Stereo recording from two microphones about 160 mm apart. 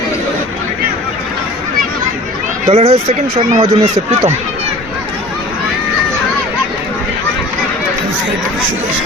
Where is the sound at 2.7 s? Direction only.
40° right (ahead or behind).